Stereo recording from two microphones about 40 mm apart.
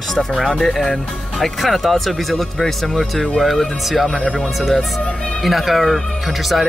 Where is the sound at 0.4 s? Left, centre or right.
Centre.